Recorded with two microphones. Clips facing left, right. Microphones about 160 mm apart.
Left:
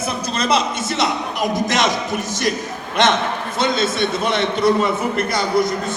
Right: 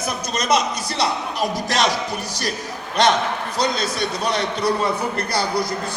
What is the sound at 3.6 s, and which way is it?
A man's voice, 25° left (ahead or behind).